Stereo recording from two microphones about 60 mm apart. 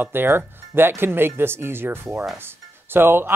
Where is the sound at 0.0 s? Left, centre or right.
Right.